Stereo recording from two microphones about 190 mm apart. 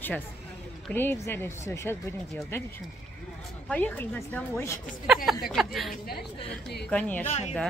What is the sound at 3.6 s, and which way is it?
Speech, 10° left (ahead or behind).